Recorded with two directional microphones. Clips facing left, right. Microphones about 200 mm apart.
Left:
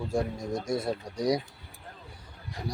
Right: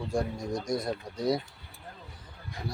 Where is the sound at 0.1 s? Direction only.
25° left (ahead or behind).